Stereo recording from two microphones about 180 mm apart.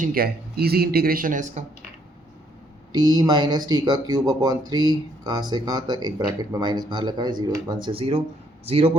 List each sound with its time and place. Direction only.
0.0 s speech: 55° right (ahead or behind)
2.9 s a man's voice: 25° right (ahead or behind)